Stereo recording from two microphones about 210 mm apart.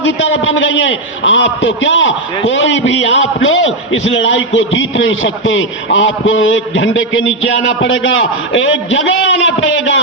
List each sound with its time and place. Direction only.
0.0 s a man's voice: 65° left (ahead or behind)